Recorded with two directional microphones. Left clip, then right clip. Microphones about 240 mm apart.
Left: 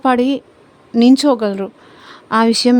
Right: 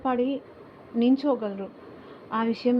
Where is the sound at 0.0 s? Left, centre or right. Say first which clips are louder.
Left 12 dB; left.